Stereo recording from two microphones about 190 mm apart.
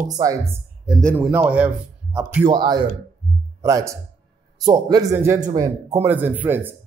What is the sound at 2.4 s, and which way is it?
A man's voice, 20° right (ahead or behind).